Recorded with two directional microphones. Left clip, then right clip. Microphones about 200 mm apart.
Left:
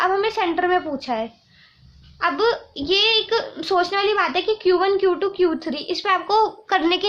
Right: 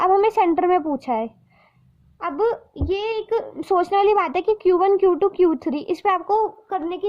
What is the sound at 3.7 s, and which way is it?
Speech, 50° right (ahead or behind).